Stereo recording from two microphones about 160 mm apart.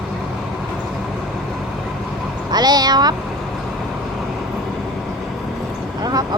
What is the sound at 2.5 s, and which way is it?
Speech, 25° right (ahead or behind).